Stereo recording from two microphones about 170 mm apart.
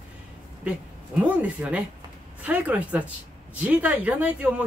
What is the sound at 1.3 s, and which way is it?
Speech, 10° right (ahead or behind).